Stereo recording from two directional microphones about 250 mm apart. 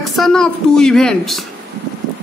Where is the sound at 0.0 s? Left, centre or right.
Centre.